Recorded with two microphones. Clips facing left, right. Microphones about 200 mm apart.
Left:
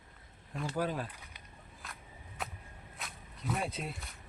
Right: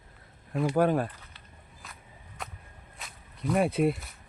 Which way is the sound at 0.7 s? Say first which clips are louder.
Right 10 dB; 55° right (ahead or behind).